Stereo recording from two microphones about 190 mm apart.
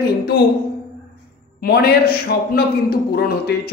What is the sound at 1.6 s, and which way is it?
A man's voice, 55° left (ahead or behind).